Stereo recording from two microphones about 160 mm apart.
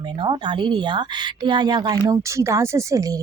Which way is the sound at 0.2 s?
30° right (ahead or behind).